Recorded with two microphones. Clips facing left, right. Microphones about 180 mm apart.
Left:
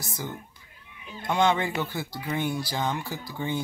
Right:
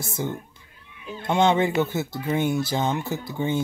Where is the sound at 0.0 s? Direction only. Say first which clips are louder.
Right 6 dB; 25° right (ahead or behind).